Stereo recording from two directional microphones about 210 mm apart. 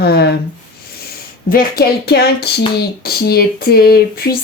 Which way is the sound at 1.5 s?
45° left (ahead or behind).